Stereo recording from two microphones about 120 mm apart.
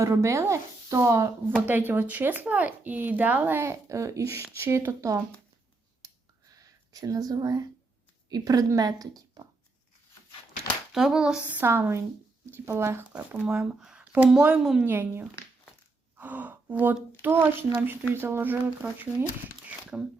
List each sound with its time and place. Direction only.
0.0 s speech: 25° right (ahead or behind)
6.0 s a sound: 25° right (ahead or behind)
8.3 s speech: 30° right (ahead or behind)
10.9 s speech: 5° right (ahead or behind)
14.8 s speech: 15° right (ahead or behind)